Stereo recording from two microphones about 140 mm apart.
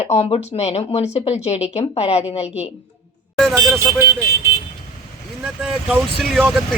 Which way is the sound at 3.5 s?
20° right (ahead or behind).